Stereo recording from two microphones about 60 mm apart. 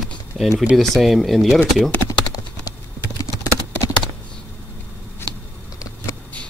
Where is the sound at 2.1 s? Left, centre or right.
Left.